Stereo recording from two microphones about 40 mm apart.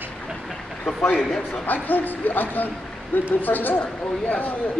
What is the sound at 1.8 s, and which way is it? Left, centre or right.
Speech, left.